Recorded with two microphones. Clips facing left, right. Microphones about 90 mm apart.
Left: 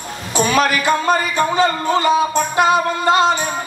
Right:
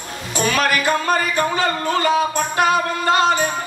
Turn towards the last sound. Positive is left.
turn(degrees=20)  # may be behind; listen again after turning